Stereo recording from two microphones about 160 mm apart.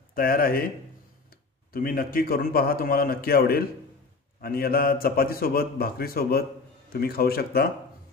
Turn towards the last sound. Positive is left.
turn(degrees=75)  # may be behind; listen again after turning